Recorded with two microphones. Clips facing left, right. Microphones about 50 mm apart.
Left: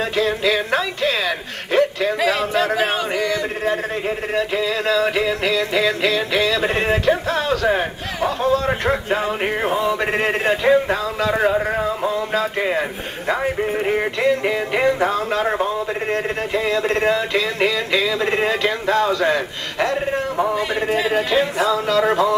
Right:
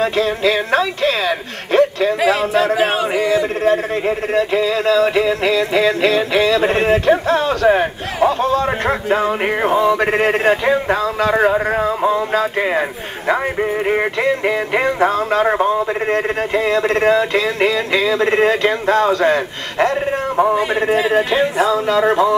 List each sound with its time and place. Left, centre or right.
0.0 s speech: right
2.1 s speech: centre
2.7 s a sound: centre
3.6 s music: right
6.7 s a man's voice: right
8.6 s a man's voice: centre; by 20.0 s right
20.3 s a man's voice: centre